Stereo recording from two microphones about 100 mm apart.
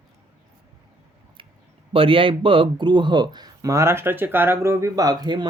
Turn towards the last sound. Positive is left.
turn(degrees=-45)  # may be behind; listen again after turning